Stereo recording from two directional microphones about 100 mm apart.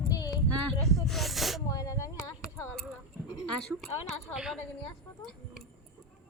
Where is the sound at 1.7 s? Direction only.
35° left (ahead or behind).